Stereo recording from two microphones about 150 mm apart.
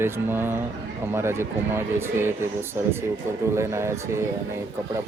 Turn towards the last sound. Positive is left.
turn(degrees=-20)  # may be behind; listen again after turning